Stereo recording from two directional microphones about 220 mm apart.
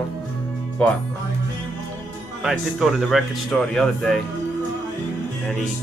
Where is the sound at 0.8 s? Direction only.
5° left (ahead or behind).